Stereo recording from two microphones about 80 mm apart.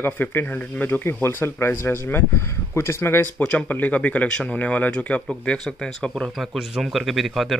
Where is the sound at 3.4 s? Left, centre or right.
Centre.